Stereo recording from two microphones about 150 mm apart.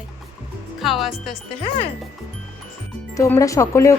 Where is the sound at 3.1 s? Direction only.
20° left (ahead or behind).